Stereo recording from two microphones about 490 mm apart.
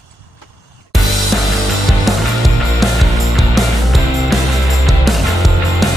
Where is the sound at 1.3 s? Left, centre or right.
Centre.